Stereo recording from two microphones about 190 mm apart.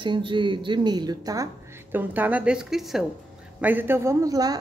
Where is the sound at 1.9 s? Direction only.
10° right (ahead or behind).